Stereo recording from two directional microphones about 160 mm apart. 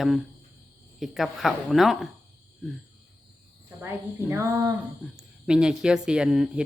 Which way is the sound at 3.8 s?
15° right (ahead or behind).